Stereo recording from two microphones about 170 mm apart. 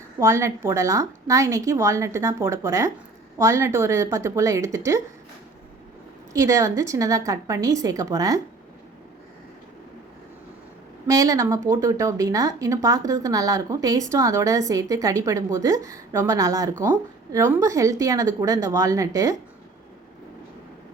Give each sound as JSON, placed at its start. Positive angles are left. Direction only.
{"t": 0.2, "sound": "a woman's voice", "side_deg": -15}
{"t": 6.3, "sound": "a woman's voice", "side_deg": -20}
{"t": 11.0, "sound": "a woman's voice", "side_deg": -20}